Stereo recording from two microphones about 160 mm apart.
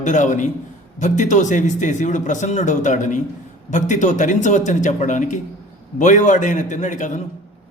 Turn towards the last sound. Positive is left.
turn(degrees=50)  # may be behind; listen again after turning